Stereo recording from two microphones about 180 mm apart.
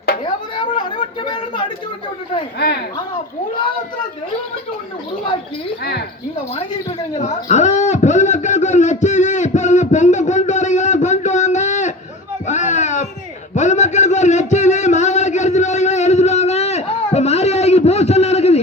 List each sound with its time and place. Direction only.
0.5 s chatter: 25° left (ahead or behind)
7.2 s a man's voice: 40° left (ahead or behind)
12.5 s a sound: 40° left (ahead or behind)